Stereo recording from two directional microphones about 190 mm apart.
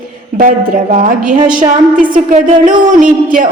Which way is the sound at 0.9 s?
45° right (ahead or behind).